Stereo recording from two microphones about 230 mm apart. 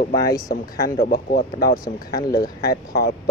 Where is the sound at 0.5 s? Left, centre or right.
Left.